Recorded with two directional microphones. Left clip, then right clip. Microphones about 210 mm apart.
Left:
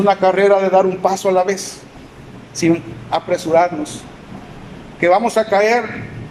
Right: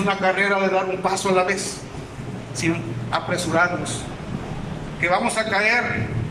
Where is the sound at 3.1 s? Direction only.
25° left (ahead or behind).